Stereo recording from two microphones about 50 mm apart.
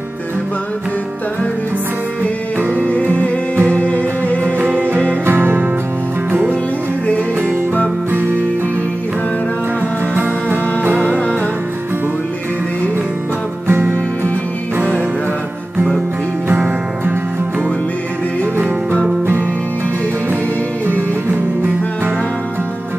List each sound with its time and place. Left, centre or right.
2.6 s music: right
2.9 s music: left
4.6 s music: right
8.1 s music: right
10.1 s music: right
11.0 s music: left
13.7 s music: right
16.4 s music: right